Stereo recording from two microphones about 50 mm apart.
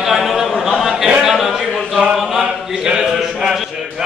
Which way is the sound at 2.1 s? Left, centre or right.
Centre.